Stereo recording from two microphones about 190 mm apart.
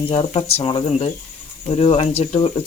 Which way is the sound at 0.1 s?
30° left (ahead or behind).